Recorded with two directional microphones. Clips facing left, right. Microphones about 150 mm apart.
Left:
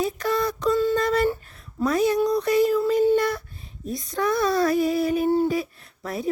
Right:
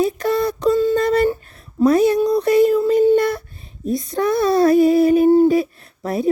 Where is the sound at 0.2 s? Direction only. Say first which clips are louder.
Right 5 dB; 25° right (ahead or behind).